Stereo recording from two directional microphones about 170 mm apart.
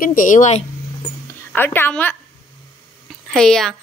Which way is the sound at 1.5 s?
15° left (ahead or behind).